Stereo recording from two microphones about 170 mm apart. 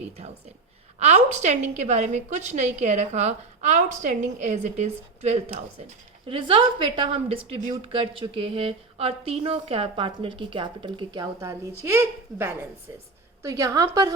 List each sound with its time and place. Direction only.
0.9 s a woman's voice: 40° right (ahead or behind); by 14.1 s 20° right (ahead or behind)